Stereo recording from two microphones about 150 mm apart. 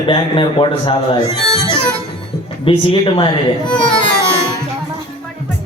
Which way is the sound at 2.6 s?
35° left (ahead or behind).